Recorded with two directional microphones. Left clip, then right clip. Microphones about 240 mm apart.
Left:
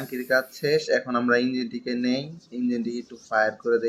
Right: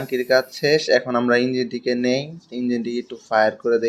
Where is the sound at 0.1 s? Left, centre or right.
Right.